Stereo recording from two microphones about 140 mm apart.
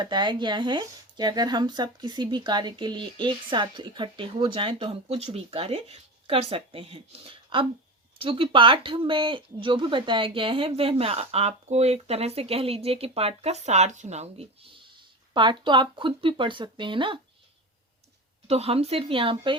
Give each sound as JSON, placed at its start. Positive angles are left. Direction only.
{"t": 0.0, "sound": "speech", "side_deg": -30}
{"t": 18.4, "sound": "speech", "side_deg": -45}